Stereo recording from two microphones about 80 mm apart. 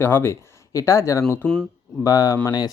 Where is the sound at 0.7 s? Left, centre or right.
Left.